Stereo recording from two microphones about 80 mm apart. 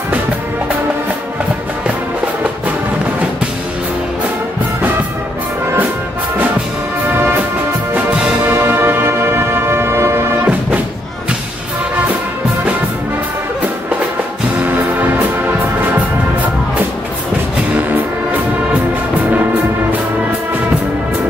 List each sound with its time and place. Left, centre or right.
8.5 s music: right
14.6 s music: right